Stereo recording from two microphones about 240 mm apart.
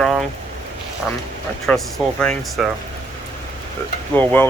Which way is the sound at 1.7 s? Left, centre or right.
Centre.